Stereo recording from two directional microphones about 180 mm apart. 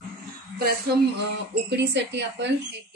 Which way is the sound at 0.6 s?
60° right (ahead or behind).